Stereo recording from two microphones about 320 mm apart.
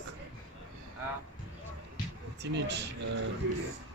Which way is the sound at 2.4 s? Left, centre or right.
Right.